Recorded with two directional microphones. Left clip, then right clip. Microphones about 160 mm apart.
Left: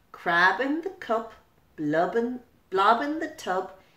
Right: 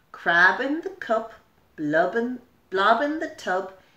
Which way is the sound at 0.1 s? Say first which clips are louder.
Right 3 dB; 15° right (ahead or behind).